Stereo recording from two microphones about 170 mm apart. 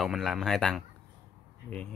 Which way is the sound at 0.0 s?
Centre (ahead or behind).